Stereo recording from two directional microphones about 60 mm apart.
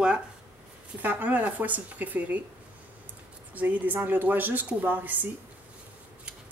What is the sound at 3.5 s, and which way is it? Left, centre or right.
Speech, right.